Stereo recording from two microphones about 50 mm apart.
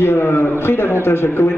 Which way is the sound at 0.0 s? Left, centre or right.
Left.